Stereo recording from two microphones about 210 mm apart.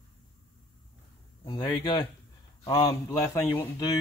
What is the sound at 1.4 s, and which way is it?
Speech, 15° left (ahead or behind).